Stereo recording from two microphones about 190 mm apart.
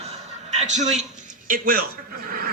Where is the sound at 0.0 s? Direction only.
35° right (ahead or behind).